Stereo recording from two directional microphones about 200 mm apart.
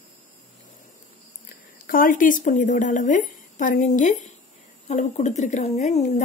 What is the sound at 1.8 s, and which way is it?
A woman's voice, 45° left (ahead or behind).